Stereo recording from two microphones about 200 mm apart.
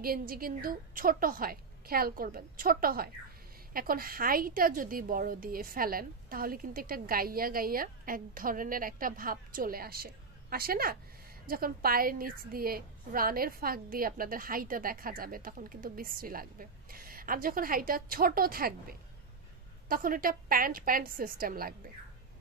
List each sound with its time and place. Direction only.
0.0 s a woman's voice: 45° right (ahead or behind)